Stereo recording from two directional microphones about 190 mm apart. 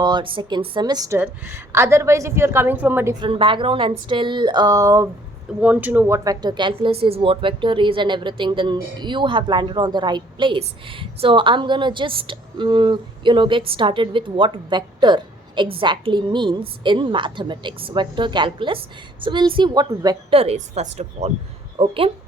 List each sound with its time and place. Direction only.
0.0 s a woman's voice: 25° right (ahead or behind)
3.2 s a woman's voice: 25° right (ahead or behind)
20.4 s a woman's voice: 35° right (ahead or behind)